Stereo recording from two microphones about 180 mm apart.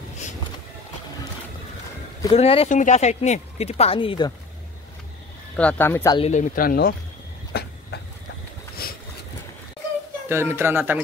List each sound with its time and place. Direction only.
2.3 s speech: 35° left (ahead or behind)
5.6 s speech: 10° left (ahead or behind)
6.1 s speech: 40° left (ahead or behind); by 7.0 s 55° left (ahead or behind)
7.5 s a sound: 60° left (ahead or behind)
8.8 s vehicle: 55° left (ahead or behind)
10.2 s speech: 15° right (ahead or behind)